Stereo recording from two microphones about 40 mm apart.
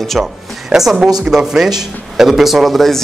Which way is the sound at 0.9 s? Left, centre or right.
Centre.